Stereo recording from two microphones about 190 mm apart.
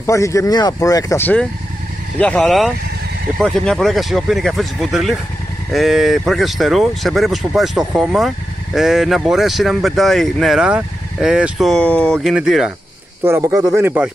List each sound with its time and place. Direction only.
0.0 s speech: 15° left (ahead or behind); by 12.7 s 5° right (ahead or behind)
13.2 s speech: 15° right (ahead or behind)